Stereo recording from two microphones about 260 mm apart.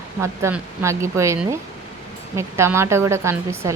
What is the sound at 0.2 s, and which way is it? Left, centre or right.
Speech, centre.